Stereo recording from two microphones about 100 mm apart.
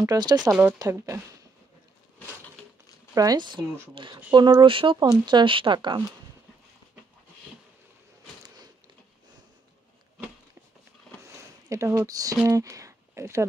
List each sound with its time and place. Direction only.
0.0 s speech: 40° right (ahead or behind)
0.4 s speech: 15° right (ahead or behind)
0.7 s speech: 35° right (ahead or behind)
3.2 s speech: 45° right (ahead or behind)
3.6 s speech: 25° right (ahead or behind)
3.9 s speech: 50° right (ahead or behind)
11.2 s a sound: 30° right (ahead or behind)
12.4 s speech: 35° right (ahead or behind)